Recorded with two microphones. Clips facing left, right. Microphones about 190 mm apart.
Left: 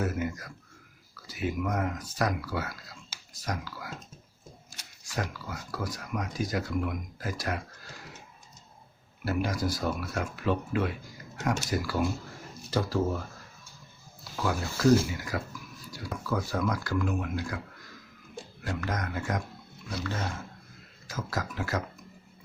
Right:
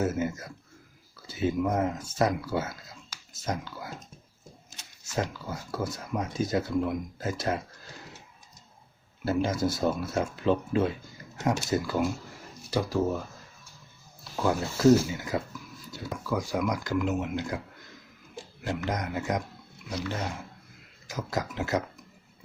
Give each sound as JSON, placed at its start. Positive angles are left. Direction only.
{"t": 0.0, "sound": "speech", "side_deg": -25}
{"t": 9.2, "sound": "speech", "side_deg": -25}
{"t": 14.3, "sound": "speech", "side_deg": -25}